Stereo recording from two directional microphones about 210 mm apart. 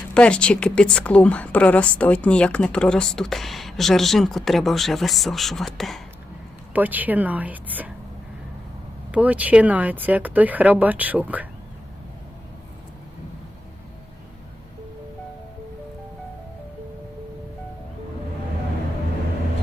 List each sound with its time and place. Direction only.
0.1 s speech: 5° left (ahead or behind)
9.1 s speech: 5° right (ahead or behind)